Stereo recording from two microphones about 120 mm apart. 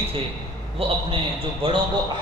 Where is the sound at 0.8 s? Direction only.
50° right (ahead or behind).